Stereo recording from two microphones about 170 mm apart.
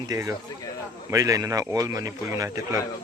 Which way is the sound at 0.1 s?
20° right (ahead or behind).